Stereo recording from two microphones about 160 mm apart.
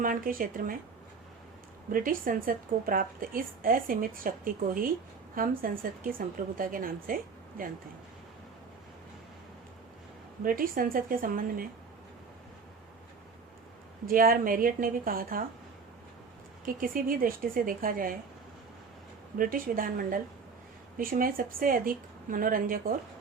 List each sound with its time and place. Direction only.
0.0 s a woman's voice: 60° right (ahead or behind)
1.9 s a woman's voice: 60° right (ahead or behind)
10.4 s a woman's voice: 60° right (ahead or behind)
14.1 s a woman's voice: 60° right (ahead or behind)
16.6 s a woman's voice: 60° right (ahead or behind)
19.4 s a woman's voice: 60° right (ahead or behind)